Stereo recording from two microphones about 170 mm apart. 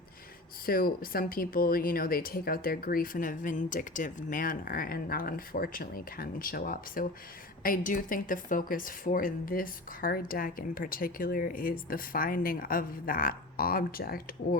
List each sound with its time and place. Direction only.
0.6 s a woman's voice: 60° left (ahead or behind)